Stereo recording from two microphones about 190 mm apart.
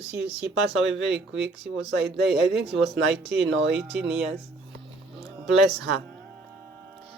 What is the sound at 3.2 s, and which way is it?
Speech, 65° right (ahead or behind).